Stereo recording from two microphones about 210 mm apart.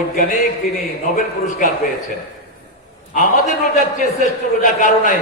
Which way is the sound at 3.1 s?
35° left (ahead or behind).